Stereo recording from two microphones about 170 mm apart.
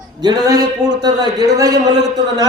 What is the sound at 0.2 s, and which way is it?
A man's voice, 25° right (ahead or behind).